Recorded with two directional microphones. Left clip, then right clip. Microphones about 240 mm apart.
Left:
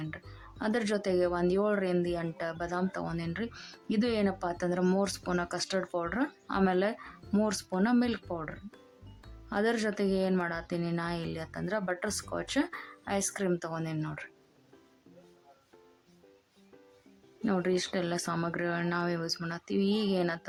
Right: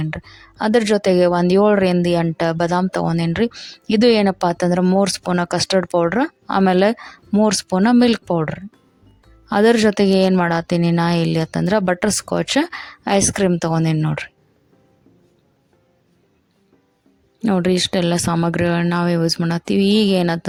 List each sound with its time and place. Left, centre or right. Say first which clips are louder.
0.0 s speech: right 13 dB; right
17.4 s speech: right 12 dB; right